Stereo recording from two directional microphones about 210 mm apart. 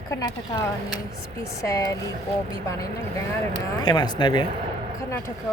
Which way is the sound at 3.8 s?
20° left (ahead or behind).